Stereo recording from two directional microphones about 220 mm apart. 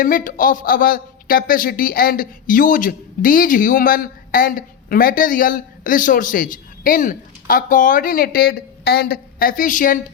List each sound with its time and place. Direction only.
0.0 s a man's voice: 40° left (ahead or behind)